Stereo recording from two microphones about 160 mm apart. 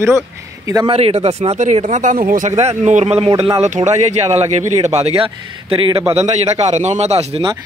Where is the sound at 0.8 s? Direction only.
40° right (ahead or behind).